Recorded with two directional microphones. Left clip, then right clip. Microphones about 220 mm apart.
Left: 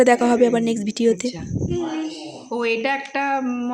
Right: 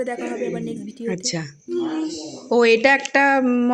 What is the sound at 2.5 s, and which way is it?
Speech, 30° right (ahead or behind).